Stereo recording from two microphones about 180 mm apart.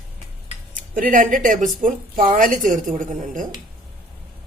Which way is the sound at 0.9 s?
45° right (ahead or behind).